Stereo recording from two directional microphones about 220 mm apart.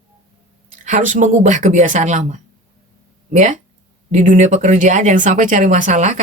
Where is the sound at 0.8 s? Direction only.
35° right (ahead or behind).